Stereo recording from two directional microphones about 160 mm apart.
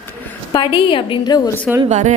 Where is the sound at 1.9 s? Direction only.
45° right (ahead or behind).